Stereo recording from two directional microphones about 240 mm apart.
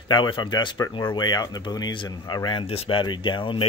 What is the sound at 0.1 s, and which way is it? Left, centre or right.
Speech, centre.